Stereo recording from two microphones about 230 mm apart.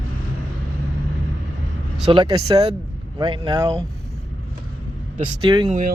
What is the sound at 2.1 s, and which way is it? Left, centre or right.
Speech, right.